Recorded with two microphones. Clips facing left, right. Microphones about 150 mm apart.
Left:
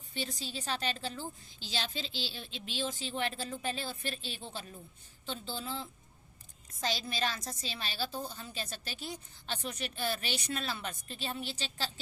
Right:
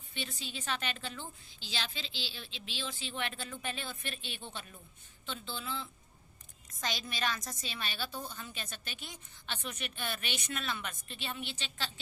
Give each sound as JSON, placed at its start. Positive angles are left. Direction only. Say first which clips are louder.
{"t": 0.1, "sound": "a woman's voice", "louder": "left 3 dB", "side_deg": 40}